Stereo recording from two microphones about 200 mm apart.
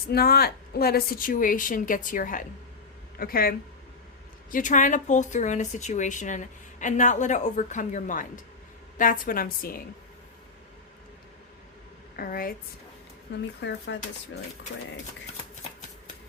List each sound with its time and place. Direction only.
0.1 s speech: 50° left (ahead or behind)
4.5 s speech: 40° left (ahead or behind)
12.1 s a woman's voice: 45° left (ahead or behind)
13.6 s speech: 65° left (ahead or behind)